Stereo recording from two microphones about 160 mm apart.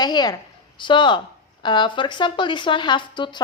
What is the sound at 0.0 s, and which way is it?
Speech, 25° left (ahead or behind).